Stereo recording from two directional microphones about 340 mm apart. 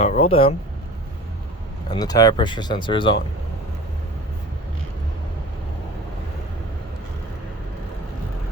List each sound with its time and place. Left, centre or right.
0.0 s speech: centre
1.9 s speech: centre